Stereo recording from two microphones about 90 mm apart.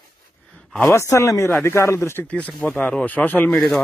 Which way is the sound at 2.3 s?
15° left (ahead or behind).